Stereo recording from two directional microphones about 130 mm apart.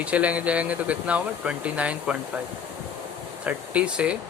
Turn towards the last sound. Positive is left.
turn(degrees=-10)  # may be behind; listen again after turning